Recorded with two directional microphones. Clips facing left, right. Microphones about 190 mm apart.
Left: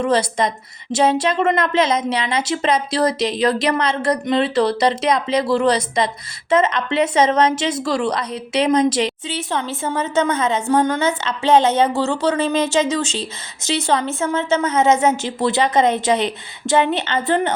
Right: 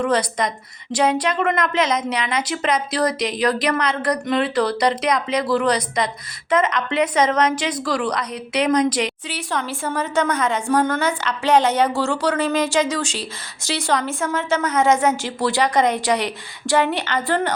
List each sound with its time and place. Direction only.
0.0 s a woman's voice: 25° left (ahead or behind)